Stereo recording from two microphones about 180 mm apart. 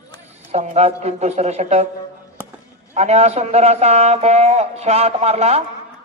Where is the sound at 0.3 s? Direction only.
40° right (ahead or behind).